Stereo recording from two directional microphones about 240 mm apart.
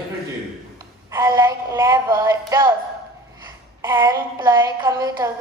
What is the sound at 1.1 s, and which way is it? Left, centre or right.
A woman's voice, centre.